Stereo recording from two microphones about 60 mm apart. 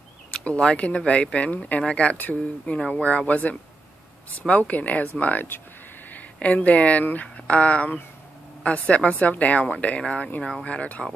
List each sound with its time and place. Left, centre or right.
0.3 s speech: centre